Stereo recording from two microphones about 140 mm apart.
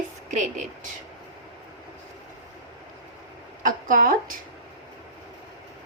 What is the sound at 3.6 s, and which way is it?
Speech, 75° right (ahead or behind).